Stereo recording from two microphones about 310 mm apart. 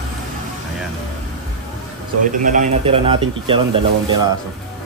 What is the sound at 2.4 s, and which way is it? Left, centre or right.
Speech, right.